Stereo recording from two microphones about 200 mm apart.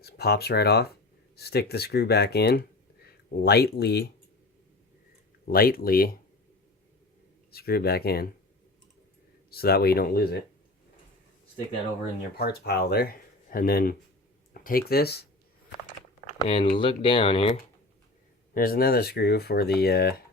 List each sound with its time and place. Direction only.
0.0 s speech: 55° left (ahead or behind)
5.5 s speech: 50° left (ahead or behind)
7.5 s speech: 50° left (ahead or behind)
9.5 s speech: 50° left (ahead or behind)
12.4 s speech: 50° left (ahead or behind)
16.4 s speech: 30° left (ahead or behind)
18.5 s speech: 45° left (ahead or behind)